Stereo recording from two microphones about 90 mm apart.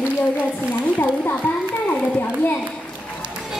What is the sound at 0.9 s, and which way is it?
Music, 20° left (ahead or behind).